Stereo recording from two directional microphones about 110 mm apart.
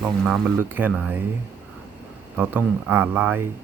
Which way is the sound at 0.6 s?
20° right (ahead or behind).